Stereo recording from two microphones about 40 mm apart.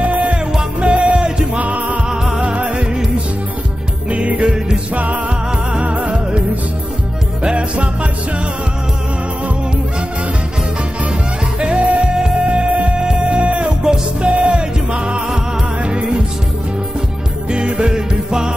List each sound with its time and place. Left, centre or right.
0.0 s music: right
2.0 s music: centre
2.4 s music: right
4.1 s music: right
11.6 s music: right
13.7 s music: right
14.3 s music: right
17.5 s music: right